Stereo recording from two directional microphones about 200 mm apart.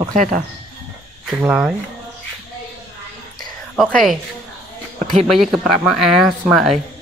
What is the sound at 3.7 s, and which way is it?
Speech, centre (ahead or behind).